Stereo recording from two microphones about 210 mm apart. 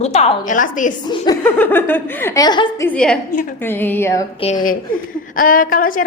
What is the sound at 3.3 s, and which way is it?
Speech, 40° left (ahead or behind).